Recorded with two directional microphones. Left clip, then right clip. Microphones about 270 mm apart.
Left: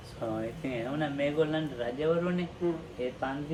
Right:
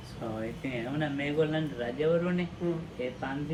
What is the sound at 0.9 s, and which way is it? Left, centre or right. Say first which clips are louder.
Speech: left 1 dB; centre.